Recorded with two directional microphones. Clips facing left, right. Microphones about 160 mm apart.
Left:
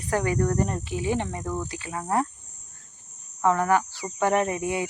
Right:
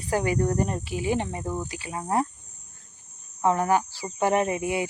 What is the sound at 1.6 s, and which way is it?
Cricket, 15° right (ahead or behind).